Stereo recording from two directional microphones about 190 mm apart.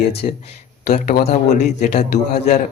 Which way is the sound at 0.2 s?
40° left (ahead or behind).